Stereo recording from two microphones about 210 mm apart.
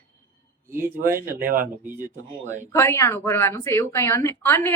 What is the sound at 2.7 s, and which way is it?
A woman's voice, 10° left (ahead or behind).